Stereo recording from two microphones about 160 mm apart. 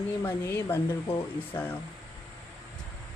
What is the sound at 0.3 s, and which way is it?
Speech, 15° left (ahead or behind).